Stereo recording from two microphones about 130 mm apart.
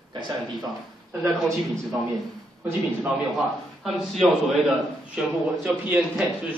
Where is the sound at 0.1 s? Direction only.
35° right (ahead or behind).